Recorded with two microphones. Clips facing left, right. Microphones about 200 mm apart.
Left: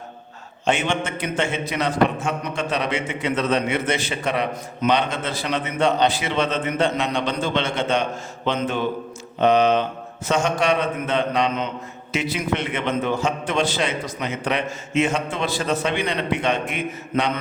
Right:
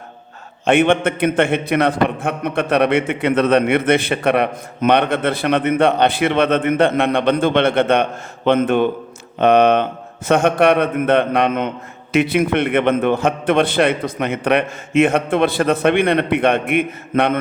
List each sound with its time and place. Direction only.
0.6 s a man's voice: 55° right (ahead or behind)